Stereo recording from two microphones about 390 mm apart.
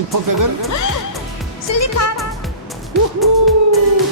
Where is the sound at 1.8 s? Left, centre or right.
Left.